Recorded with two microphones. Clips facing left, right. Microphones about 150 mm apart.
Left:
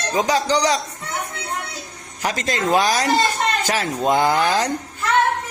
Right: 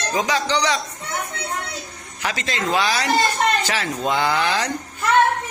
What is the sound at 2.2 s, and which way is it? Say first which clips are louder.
Speech: left 3 dB; 45° left (ahead or behind).